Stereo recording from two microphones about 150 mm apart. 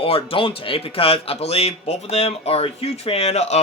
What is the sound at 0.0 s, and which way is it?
Speech, 40° left (ahead or behind).